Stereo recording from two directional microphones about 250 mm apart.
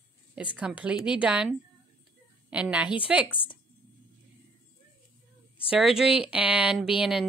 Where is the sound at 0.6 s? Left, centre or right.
Centre.